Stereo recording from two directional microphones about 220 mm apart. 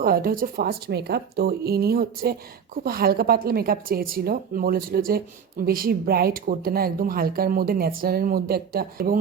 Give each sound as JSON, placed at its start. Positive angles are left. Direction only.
{"t": 0.0, "sound": "speech", "side_deg": -40}